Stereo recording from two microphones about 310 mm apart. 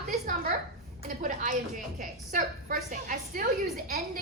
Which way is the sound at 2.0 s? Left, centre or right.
Right.